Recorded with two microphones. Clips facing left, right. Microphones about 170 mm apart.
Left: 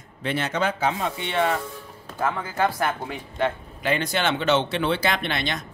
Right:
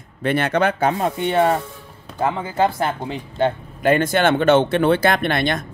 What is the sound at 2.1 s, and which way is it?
Speech, 20° right (ahead or behind).